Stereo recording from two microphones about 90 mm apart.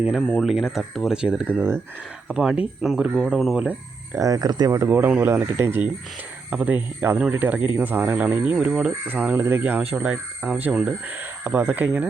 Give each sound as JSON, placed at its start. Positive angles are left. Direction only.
{"t": 0.2, "sound": "speech", "side_deg": 10}
{"t": 0.4, "sound": "speech", "side_deg": -5}
{"t": 1.5, "sound": "speech", "side_deg": -25}
{"t": 2.2, "sound": "speech", "side_deg": -10}
{"t": 3.5, "sound": "speech", "side_deg": -10}
{"t": 4.1, "sound": "speech", "side_deg": -40}
{"t": 4.8, "sound": "speech", "side_deg": -20}
{"t": 9.0, "sound": "speech", "side_deg": -20}